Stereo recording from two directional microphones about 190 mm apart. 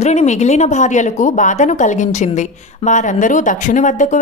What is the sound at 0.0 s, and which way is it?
Speech, 35° left (ahead or behind).